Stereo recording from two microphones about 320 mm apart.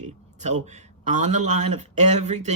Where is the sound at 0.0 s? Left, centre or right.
Right.